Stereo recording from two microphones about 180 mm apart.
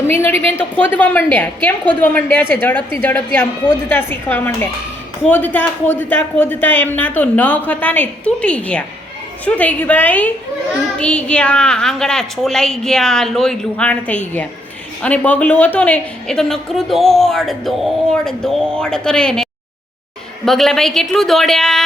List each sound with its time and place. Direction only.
0.1 s a woman's voice: 10° left (ahead or behind)